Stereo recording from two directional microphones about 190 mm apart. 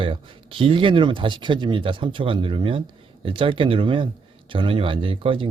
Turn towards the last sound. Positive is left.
turn(degrees=-25)  # may be behind; listen again after turning